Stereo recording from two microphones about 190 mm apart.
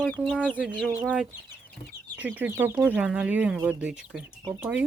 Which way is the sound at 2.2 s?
10° right (ahead or behind).